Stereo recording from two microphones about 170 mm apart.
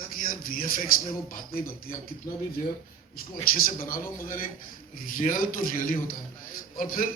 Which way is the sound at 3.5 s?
55° left (ahead or behind).